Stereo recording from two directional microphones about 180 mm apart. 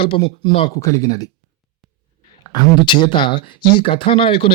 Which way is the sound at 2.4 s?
25° left (ahead or behind).